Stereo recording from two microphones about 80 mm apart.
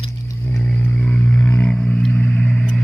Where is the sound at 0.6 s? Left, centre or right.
Centre.